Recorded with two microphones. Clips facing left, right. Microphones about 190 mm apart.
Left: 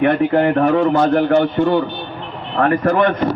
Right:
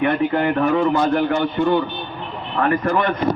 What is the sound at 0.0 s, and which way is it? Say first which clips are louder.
A man's voice: left 4 dB; 50° left (ahead or behind).